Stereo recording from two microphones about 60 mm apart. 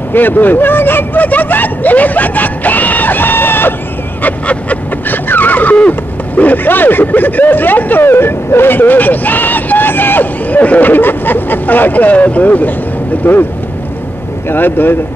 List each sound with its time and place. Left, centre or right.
0.1 s speech: left
4.2 s a sound: left
13.2 s speech: left
14.5 s speech: left